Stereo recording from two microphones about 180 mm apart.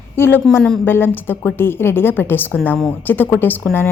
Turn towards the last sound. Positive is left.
turn(degrees=10)  # may be behind; listen again after turning